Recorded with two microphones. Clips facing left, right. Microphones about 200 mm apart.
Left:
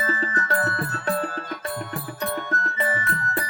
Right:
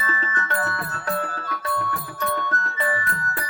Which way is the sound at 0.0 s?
40° left (ahead or behind).